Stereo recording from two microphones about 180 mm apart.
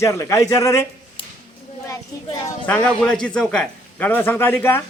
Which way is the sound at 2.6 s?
10° left (ahead or behind).